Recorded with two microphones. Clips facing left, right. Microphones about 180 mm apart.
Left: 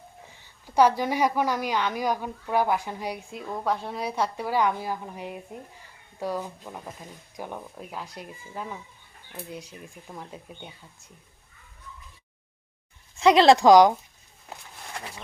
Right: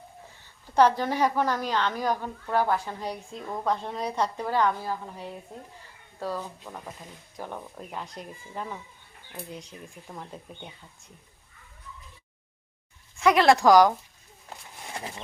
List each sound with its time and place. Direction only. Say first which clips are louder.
0.6 s a woman's voice: left 1 dB; 10° left (ahead or behind)
13.1 s speech: left 3 dB; 25° left (ahead or behind)